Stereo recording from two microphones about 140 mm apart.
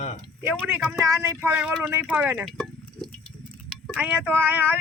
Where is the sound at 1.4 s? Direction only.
10° right (ahead or behind).